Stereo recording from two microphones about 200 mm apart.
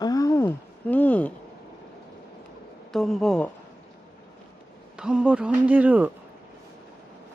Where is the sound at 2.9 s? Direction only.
Centre (ahead or behind).